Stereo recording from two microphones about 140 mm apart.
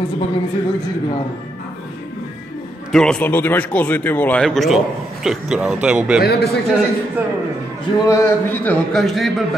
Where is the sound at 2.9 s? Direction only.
5° left (ahead or behind).